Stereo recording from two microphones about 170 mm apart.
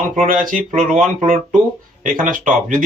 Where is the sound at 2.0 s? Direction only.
55° right (ahead or behind).